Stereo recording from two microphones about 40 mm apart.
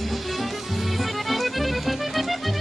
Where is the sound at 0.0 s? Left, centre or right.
Centre.